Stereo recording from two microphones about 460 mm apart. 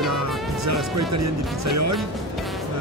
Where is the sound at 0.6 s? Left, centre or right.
Right.